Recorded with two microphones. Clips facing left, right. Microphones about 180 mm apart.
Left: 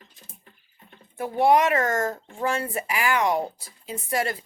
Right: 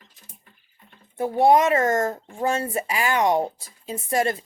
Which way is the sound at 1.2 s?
25° right (ahead or behind).